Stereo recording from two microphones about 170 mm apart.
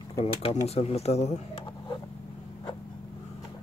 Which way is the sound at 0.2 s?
35° left (ahead or behind).